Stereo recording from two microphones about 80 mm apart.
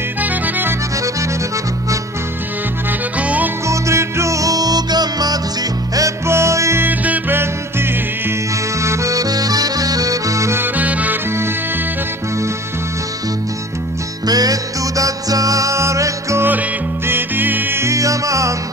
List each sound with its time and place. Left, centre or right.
0.2 s accordion: right
3.2 s music: centre
3.6 s music: right
5.9 s music: right
6.8 s music: right
8.8 s accordion: right
10.6 s accordion: centre
14.2 s music: right
17.1 s music: right